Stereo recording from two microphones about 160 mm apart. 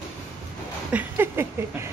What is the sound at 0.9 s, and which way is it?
Speech, 10° right (ahead or behind).